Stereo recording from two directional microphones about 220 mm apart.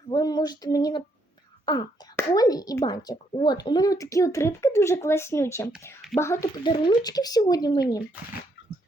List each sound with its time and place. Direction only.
0.1 s a child's voice: 15° left (ahead or behind)